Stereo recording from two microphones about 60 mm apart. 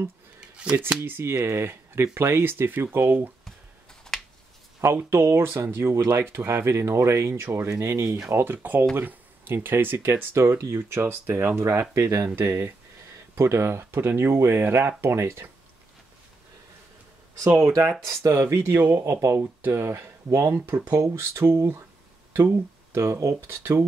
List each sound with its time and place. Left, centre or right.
0.4 s a sound: centre
1.0 s speech: right
4.1 s a sound: centre
4.8 s speech: right
12.3 s speech: right
17.5 s speech: right
18.0 s speech: right
18.5 s speech: right
18.8 s speech: right
20.5 s speech: right
22.9 s speech: right